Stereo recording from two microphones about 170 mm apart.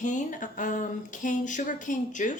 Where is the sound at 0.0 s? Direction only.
50° left (ahead or behind).